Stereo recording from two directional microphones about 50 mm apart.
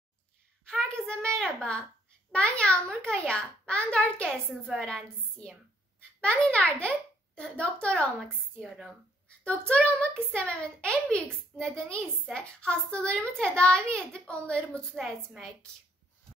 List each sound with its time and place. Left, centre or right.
0.7 s a woman's voice: centre
6.2 s a woman's voice: centre
9.4 s a woman's voice: left